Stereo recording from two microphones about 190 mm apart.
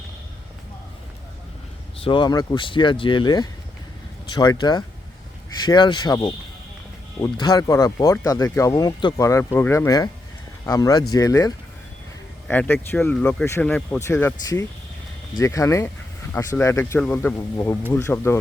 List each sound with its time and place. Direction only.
2.0 s speech: 25° left (ahead or behind)